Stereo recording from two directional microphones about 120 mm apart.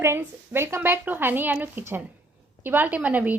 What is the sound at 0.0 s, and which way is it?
A woman's voice, 20° right (ahead or behind).